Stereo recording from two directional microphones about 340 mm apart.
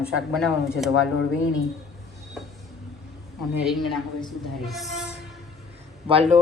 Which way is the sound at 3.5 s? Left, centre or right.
Centre.